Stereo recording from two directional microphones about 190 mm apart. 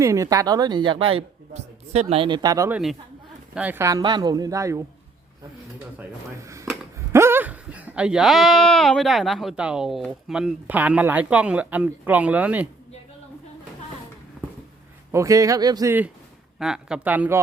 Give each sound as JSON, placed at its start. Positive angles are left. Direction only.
{"t": 0.0, "sound": "speech", "side_deg": -15}
{"t": 6.0, "sound": "speech", "side_deg": -15}
{"t": 15.1, "sound": "speech", "side_deg": -15}